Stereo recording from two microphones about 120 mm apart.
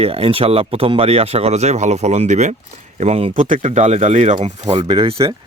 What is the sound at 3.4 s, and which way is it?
Speech, 90° right.